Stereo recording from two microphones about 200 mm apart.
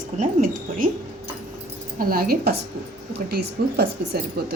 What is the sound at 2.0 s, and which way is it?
Speech, 45° right (ahead or behind).